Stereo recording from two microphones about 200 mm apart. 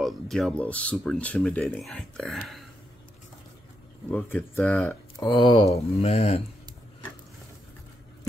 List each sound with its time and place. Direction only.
0.0 s speech: centre (ahead or behind)
4.1 s speech: 10° left (ahead or behind)
5.3 s speech: 25° left (ahead or behind)